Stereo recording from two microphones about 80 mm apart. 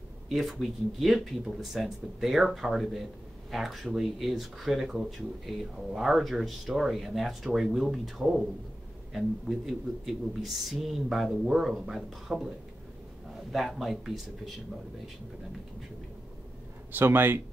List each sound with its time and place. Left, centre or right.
0.3 s speech: centre
16.9 s speech: right